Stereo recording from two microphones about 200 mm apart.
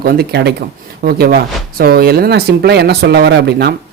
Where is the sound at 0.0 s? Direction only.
50° right (ahead or behind).